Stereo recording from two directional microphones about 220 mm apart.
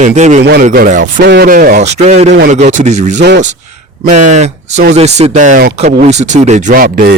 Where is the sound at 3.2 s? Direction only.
50° right (ahead or behind).